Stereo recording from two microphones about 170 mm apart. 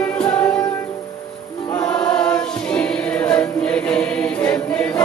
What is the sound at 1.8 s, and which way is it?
Choir, 5° left (ahead or behind).